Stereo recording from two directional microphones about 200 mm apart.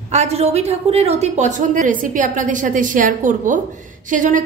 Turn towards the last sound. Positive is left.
turn(degrees=-40)  # may be behind; listen again after turning